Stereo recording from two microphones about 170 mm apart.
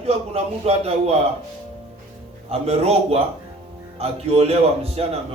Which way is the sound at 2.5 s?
35° right (ahead or behind).